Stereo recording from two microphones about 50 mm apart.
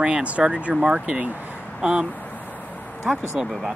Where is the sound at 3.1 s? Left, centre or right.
Centre.